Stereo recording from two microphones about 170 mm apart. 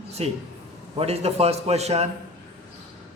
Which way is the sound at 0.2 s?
35° right (ahead or behind).